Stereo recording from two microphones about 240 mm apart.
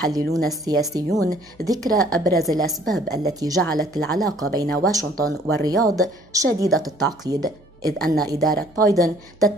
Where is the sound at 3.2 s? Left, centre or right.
Centre.